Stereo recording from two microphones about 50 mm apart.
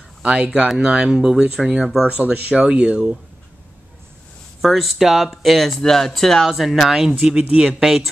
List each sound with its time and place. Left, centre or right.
0.2 s speech: centre
4.6 s speech: centre